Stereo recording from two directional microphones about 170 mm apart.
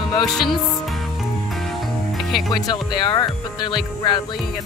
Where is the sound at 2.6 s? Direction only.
25° left (ahead or behind).